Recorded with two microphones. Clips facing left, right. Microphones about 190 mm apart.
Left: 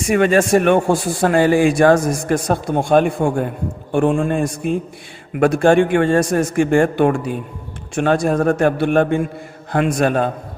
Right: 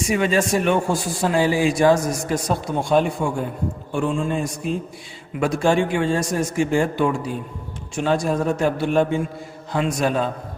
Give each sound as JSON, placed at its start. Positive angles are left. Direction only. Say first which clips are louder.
{"t": 0.0, "sound": "a man's voice", "louder": "left 5 dB", "side_deg": 55}